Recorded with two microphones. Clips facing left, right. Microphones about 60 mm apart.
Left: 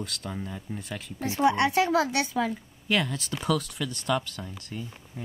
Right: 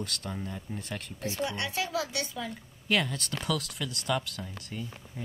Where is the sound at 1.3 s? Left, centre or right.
Left.